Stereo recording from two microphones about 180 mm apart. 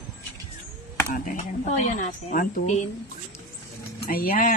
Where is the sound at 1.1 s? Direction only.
45° left (ahead or behind).